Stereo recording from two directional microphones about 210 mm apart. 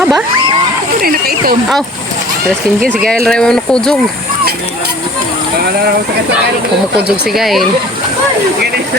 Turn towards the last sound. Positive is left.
turn(degrees=0)  # may be behind; listen again after turning